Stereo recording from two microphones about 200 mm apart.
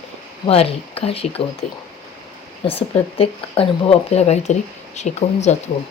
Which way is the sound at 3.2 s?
30° left (ahead or behind).